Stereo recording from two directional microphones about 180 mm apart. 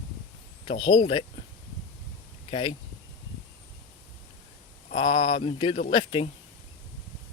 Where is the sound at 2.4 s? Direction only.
30° left (ahead or behind).